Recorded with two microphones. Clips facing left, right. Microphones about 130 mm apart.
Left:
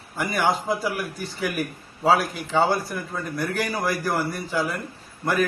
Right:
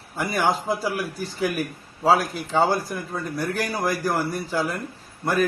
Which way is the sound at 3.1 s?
10° right (ahead or behind).